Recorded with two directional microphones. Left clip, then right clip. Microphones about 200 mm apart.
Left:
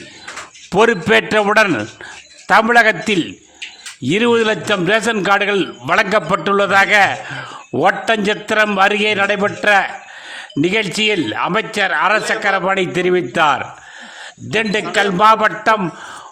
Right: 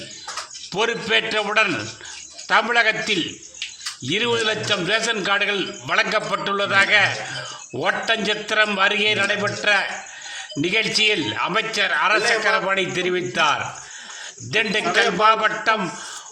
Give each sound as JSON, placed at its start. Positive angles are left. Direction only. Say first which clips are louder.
{"t": 0.7, "sound": "a man's voice", "louder": "left 8 dB", "side_deg": 45}